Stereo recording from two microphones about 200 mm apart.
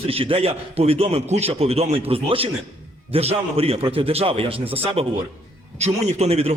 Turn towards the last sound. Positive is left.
turn(degrees=-30)  # may be behind; listen again after turning